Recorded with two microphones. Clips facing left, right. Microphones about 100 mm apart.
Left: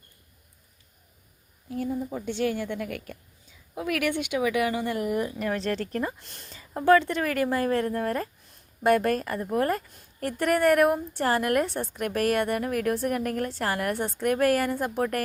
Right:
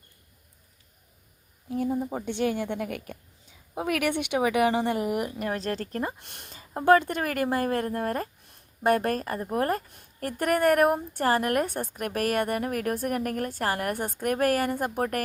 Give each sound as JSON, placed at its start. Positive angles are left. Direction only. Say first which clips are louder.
{"t": 1.9, "sound": "a woman's voice", "louder": "right 1 dB", "side_deg": -45}
{"t": 2.3, "sound": "a woman's voice", "louder": "even", "side_deg": -25}
{"t": 5.4, "sound": "speech", "louder": "left 2 dB", "side_deg": -40}
{"t": 6.1, "sound": "speech", "louder": "right 1 dB", "side_deg": -55}
{"t": 6.5, "sound": "speech", "louder": "even", "side_deg": -40}
{"t": 9.9, "sound": "a woman's voice", "louder": "left 2 dB", "side_deg": -50}